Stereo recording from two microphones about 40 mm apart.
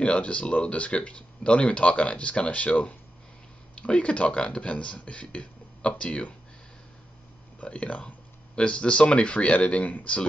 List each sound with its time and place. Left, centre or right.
0.0 s speech: left
7.6 s speech: left